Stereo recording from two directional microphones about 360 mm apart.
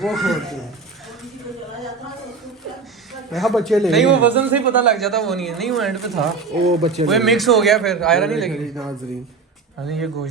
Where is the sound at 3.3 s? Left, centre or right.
Centre.